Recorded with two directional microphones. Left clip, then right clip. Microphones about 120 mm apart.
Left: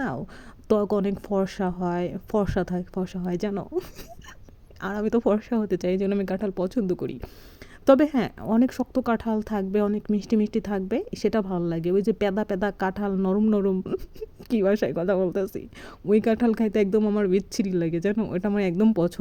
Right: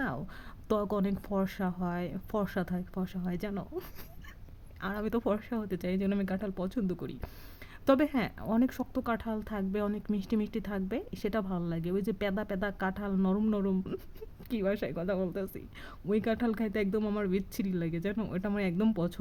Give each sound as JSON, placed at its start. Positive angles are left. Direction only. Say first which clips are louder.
{"t": 0.7, "sound": "a woman's voice", "louder": "left 8 dB", "side_deg": 30}
{"t": 4.8, "sound": "a woman's voice", "louder": "left 9 dB", "side_deg": 35}
{"t": 14.5, "sound": "a woman's voice", "louder": "left 10 dB", "side_deg": 50}
{"t": 17.0, "sound": "speech", "louder": "left 9 dB", "side_deg": 25}
{"t": 17.2, "sound": "a woman's voice", "louder": "left 10 dB", "side_deg": 40}